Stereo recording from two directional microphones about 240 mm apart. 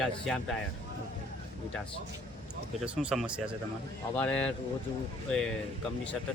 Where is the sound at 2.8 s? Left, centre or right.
Centre.